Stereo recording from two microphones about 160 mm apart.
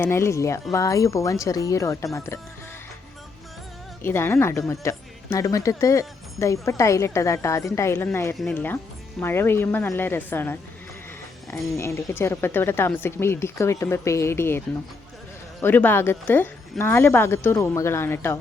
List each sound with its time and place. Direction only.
0.0 s speech: 15° left (ahead or behind)
4.0 s speech: 15° left (ahead or behind)
15.6 s speech: 10° left (ahead or behind)